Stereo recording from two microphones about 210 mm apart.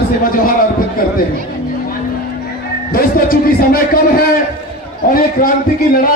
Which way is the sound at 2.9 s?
45° left (ahead or behind).